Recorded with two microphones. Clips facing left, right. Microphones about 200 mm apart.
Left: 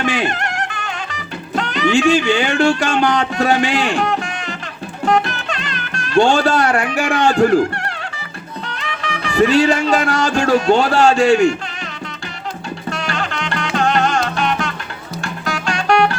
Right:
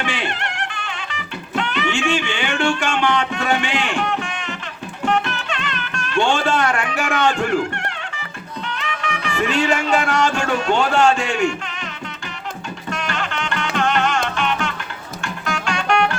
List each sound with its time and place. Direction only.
0.0 s music: 40° left (ahead or behind)
8.7 s speech: 35° left (ahead or behind)
12.9 s music: 35° left (ahead or behind)